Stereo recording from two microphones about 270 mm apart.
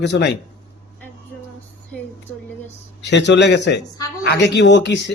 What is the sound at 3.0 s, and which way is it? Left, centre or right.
Speech, left.